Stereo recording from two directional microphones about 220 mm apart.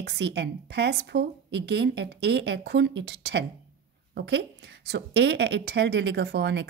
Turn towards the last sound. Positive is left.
turn(degrees=-50)  # may be behind; listen again after turning